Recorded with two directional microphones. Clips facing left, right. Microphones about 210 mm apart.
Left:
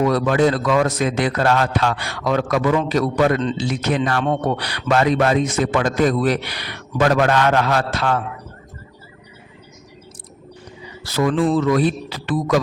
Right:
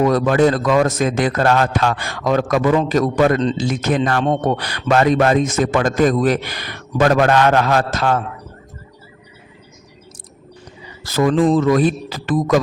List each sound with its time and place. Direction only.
0.0 s a man's voice: 45° right (ahead or behind)
11.0 s a man's voice: 45° right (ahead or behind)